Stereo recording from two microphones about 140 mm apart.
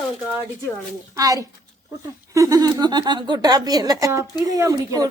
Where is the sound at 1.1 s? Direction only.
25° right (ahead or behind).